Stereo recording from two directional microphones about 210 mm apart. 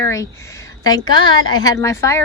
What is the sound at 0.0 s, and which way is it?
Speech, 15° left (ahead or behind).